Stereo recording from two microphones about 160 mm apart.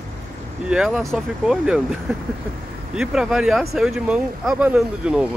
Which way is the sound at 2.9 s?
5° right (ahead or behind).